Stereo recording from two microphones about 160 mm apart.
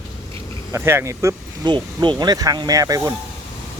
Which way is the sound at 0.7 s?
15° right (ahead or behind).